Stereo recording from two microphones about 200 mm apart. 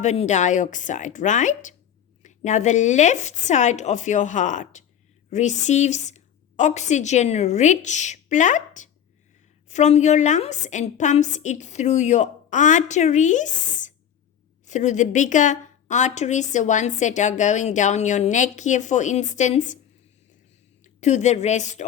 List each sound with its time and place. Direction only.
0.0 s a woman's voice: 35° left (ahead or behind)
20.8 s a woman's voice: 35° left (ahead or behind)